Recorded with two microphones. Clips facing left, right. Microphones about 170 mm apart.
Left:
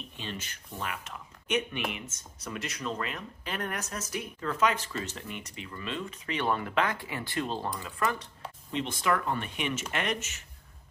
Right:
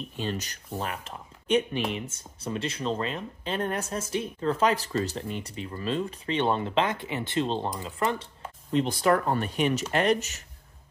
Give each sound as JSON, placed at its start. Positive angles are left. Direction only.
{"t": 0.2, "sound": "speech", "side_deg": -40}
{"t": 8.7, "sound": "speech", "side_deg": -40}